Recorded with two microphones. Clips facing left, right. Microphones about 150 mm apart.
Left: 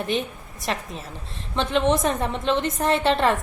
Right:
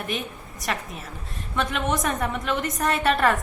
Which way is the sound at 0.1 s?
30° left (ahead or behind).